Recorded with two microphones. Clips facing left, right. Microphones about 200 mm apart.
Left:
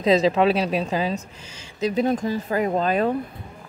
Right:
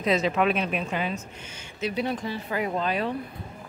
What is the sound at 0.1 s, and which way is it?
Speech, 35° left (ahead or behind).